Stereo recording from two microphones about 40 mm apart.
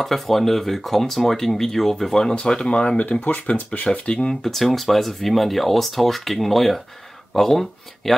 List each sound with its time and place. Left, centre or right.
0.0 s speech: centre
2.3 s speech: left
3.2 s speech: left
3.5 s speech: left
4.3 s speech: centre